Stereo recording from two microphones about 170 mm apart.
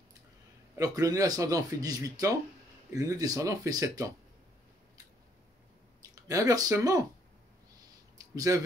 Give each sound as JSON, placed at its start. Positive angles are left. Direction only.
{"t": 0.7, "sound": "speech", "side_deg": -20}
{"t": 6.0, "sound": "speech", "side_deg": -20}